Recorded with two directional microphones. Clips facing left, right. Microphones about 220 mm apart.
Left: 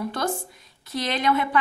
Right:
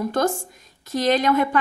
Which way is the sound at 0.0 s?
45° right (ahead or behind).